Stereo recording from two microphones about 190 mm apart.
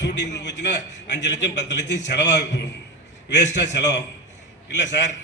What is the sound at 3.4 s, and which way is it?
Speech, 40° left (ahead or behind).